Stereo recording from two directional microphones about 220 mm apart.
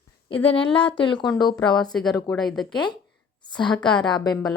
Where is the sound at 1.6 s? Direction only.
Centre (ahead or behind).